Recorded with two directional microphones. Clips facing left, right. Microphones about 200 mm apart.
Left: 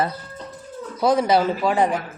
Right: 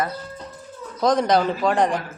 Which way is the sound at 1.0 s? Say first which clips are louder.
Left 1 dB; 5° left (ahead or behind).